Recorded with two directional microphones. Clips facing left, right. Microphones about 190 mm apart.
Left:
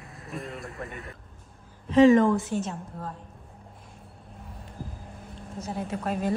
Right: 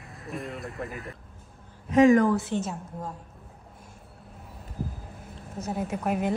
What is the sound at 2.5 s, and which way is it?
Speech, 10° left (ahead or behind).